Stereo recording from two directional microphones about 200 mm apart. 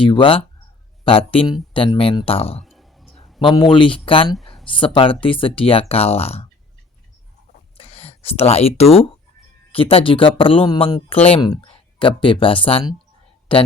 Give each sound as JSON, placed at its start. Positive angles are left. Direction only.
{"t": 0.0, "sound": "speech", "side_deg": 25}
{"t": 2.6, "sound": "a sound", "side_deg": 0}
{"t": 3.4, "sound": "speech", "side_deg": 25}
{"t": 7.8, "sound": "speech", "side_deg": 30}